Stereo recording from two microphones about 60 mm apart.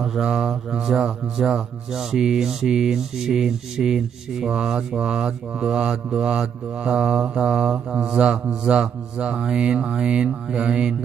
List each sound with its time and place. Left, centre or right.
0.0 s mantra: centre